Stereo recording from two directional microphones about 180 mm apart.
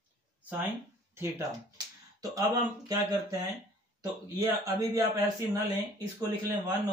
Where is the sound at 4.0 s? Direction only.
20° right (ahead or behind).